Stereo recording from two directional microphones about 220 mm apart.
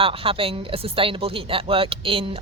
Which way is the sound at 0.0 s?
25° right (ahead or behind).